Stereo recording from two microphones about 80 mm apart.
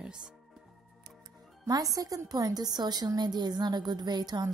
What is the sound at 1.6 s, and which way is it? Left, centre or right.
A woman's voice, right.